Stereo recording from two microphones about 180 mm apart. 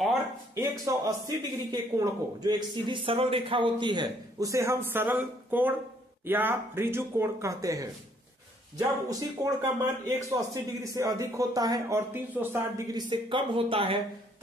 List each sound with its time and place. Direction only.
0.6 s speech: 20° right (ahead or behind)